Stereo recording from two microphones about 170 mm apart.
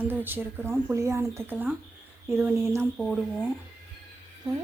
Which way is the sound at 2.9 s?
5° right (ahead or behind).